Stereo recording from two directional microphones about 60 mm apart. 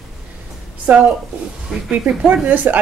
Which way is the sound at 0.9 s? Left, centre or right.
Right.